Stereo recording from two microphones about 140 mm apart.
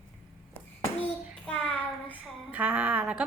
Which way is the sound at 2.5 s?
10° right (ahead or behind).